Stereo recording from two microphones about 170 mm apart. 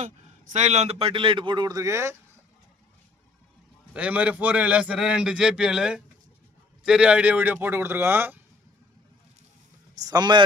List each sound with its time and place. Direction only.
0.0 s a man's voice: 45° right (ahead or behind); by 2.1 s 15° right (ahead or behind)
3.9 s a man's voice: 10° right (ahead or behind)
9.9 s speech: 20° right (ahead or behind)